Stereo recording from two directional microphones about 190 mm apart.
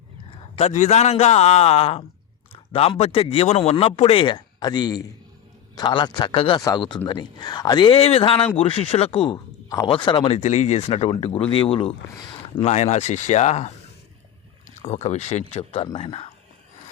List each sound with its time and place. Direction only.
0.3 s a man's voice: 30° left (ahead or behind)
14.8 s a man's voice: 35° left (ahead or behind)